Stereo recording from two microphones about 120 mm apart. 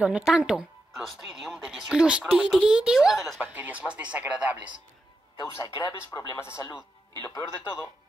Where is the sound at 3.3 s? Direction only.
15° right (ahead or behind).